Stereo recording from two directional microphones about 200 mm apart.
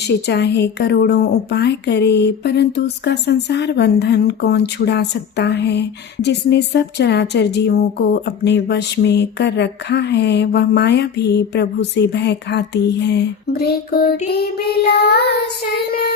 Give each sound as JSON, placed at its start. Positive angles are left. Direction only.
{"t": 0.1, "sound": "speech", "side_deg": 55}
{"t": 14.8, "sound": "child singing", "side_deg": 55}